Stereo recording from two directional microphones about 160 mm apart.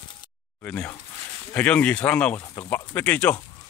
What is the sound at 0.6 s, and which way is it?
Speech, 10° left (ahead or behind).